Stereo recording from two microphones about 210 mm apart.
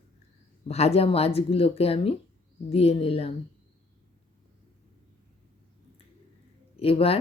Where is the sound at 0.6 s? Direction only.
30° left (ahead or behind).